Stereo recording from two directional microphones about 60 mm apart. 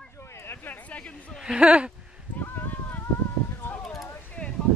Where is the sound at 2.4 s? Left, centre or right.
Left.